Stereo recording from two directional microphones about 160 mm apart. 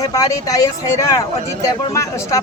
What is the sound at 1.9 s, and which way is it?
Speech, 20° left (ahead or behind).